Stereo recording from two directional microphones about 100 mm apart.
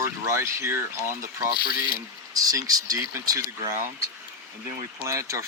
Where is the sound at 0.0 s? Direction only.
25° right (ahead or behind).